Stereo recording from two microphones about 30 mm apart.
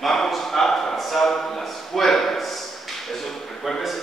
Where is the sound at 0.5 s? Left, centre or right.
Centre.